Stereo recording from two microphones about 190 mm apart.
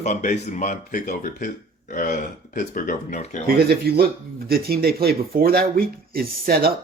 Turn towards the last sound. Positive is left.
turn(degrees=-55)  # may be behind; listen again after turning